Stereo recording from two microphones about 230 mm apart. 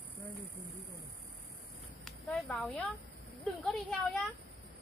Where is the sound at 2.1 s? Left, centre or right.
Centre.